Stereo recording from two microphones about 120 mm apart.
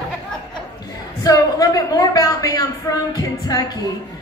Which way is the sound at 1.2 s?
30° left (ahead or behind).